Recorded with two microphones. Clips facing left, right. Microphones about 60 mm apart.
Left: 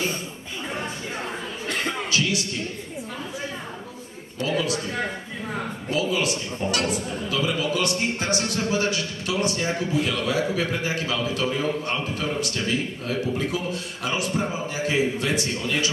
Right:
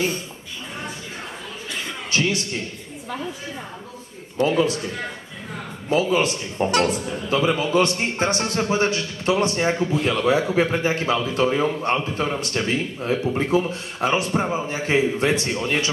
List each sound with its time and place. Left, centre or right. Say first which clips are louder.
2.0 s a sound: right 2 dB; right
4.4 s a man's voice: right 6 dB; right
5.9 s a man's voice: right 5 dB; right